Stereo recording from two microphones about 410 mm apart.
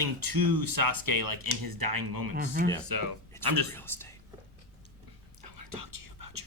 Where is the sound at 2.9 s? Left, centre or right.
Right.